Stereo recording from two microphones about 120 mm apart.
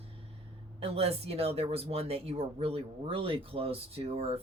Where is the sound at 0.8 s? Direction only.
55° right (ahead or behind).